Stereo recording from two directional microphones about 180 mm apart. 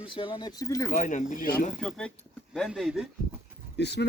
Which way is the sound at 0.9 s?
45° left (ahead or behind).